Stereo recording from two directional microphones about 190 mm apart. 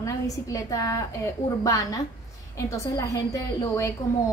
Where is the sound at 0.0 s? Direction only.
15° left (ahead or behind).